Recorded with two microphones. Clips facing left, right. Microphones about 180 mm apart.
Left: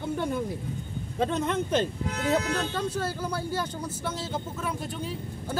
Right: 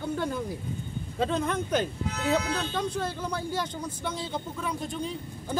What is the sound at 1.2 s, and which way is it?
Speech, 25° left (ahead or behind).